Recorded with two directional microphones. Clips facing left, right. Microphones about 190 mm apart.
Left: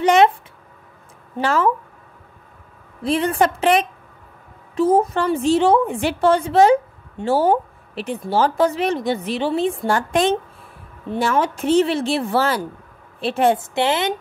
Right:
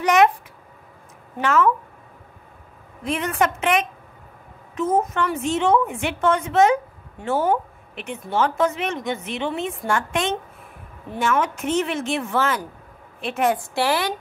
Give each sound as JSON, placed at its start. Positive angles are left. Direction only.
{"t": 0.0, "sound": "a sound", "side_deg": 30}
{"t": 1.4, "sound": "a woman's voice", "side_deg": 30}
{"t": 3.0, "sound": "a woman's voice", "side_deg": 30}